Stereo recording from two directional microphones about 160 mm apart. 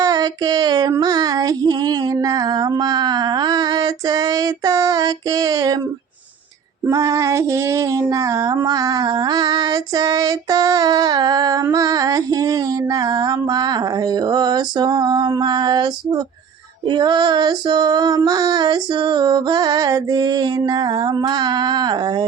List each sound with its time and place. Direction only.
0.0 s female singing: 25° right (ahead or behind)
6.8 s female singing: 20° right (ahead or behind)